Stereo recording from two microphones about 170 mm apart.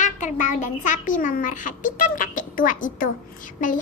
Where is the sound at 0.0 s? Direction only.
50° left (ahead or behind).